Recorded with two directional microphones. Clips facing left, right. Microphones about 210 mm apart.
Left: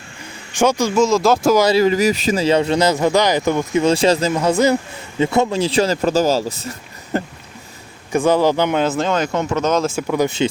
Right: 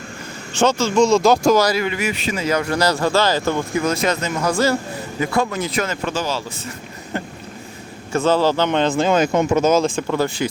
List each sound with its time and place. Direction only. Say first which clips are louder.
0.5 s speech: left 1 dB; 10° left (ahead or behind)
1.7 s speech: left 7 dB; 35° left (ahead or behind)
7.1 s a sound: left 5 dB; 40° left (ahead or behind)
8.1 s speech: left 2 dB; 15° left (ahead or behind)
9.0 s speech: right 3 dB; 10° right (ahead or behind)
9.8 s speech: left 1 dB; 5° left (ahead or behind)
10.2 s speech: left 4 dB; 25° left (ahead or behind)